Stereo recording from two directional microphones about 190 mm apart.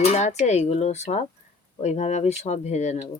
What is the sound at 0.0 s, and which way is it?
Speech, 35° left (ahead or behind).